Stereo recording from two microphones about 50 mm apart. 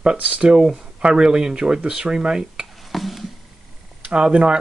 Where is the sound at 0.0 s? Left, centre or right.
Right.